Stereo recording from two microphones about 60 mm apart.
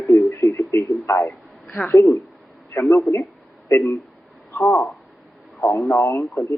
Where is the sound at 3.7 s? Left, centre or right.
Left.